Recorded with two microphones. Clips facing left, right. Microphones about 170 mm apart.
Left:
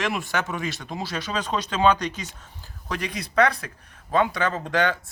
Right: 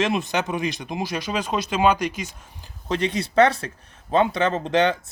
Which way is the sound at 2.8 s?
25° right (ahead or behind).